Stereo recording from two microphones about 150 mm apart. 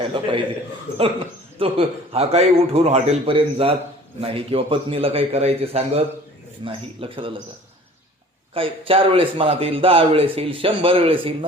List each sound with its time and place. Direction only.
0.0 s a man's voice: 35° right (ahead or behind)
1.5 s a man's voice: 35° right (ahead or behind)
8.5 s a man's voice: 35° right (ahead or behind)